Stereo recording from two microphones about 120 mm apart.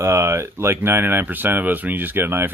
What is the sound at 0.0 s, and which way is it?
Speech, 25° right (ahead or behind).